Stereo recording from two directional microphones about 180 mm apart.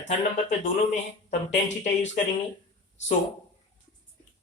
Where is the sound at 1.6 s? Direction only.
40° left (ahead or behind).